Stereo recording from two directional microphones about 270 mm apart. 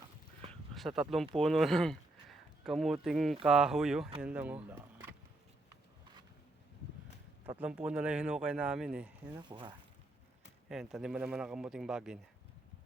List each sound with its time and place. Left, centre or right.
0.7 s a man's voice: centre
7.6 s a man's voice: centre
9.5 s speech: centre
10.7 s a man's voice: centre